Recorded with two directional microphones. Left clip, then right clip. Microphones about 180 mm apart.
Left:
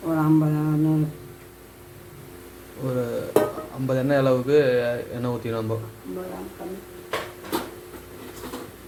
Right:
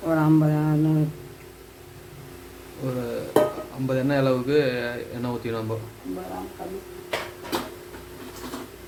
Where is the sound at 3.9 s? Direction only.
15° left (ahead or behind).